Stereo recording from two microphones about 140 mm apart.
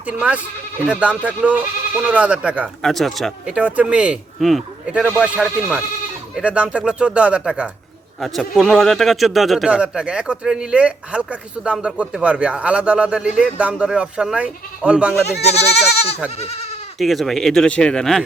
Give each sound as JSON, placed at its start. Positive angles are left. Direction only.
{"t": 0.0, "sound": "a man's voice", "side_deg": -10}
{"t": 15.4, "sound": "speech", "side_deg": 50}
{"t": 17.0, "sound": "speech", "side_deg": 0}